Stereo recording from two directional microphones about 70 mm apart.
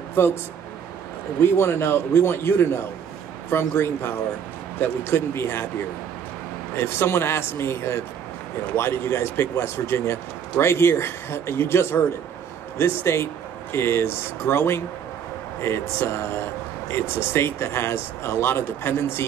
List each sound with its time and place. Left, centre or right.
0.1 s speech: left
1.4 s speech: left
6.7 s speech: left